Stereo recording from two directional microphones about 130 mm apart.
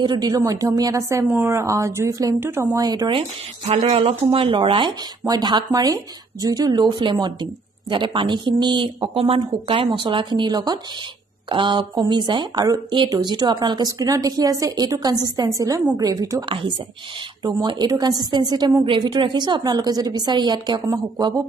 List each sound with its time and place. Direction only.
0.0 s a woman's voice: 35° right (ahead or behind)
3.1 s a woman's voice: 45° right (ahead or behind); by 21.4 s 30° right (ahead or behind)